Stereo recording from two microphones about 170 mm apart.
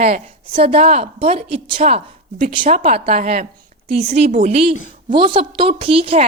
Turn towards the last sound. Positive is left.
turn(degrees=-35)  # may be behind; listen again after turning